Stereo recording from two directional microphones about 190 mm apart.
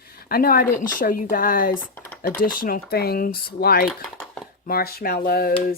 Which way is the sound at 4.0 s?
Centre (ahead or behind).